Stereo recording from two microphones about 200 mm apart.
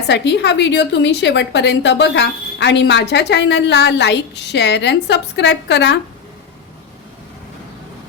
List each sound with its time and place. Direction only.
0.1 s a woman's voice: 60° left (ahead or behind)